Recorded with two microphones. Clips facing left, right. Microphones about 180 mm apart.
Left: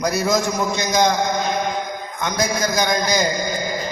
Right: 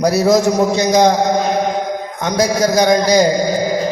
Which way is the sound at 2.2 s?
35° right (ahead or behind).